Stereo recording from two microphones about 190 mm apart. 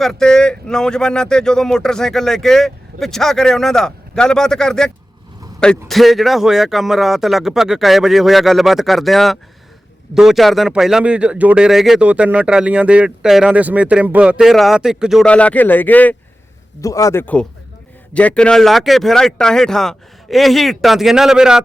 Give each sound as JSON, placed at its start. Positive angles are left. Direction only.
{"t": 0.0, "sound": "speech", "side_deg": 5}